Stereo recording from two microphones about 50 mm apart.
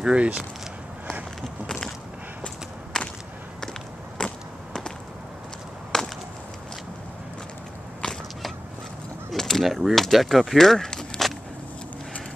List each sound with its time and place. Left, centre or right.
0.0 s speech: right
2.4 s whip: centre
4.2 s a sound: centre
5.9 s wood: centre
8.1 s a sound: centre
9.3 s speech: centre